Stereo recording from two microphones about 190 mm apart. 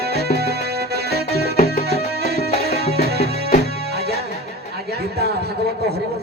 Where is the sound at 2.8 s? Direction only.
35° left (ahead or behind).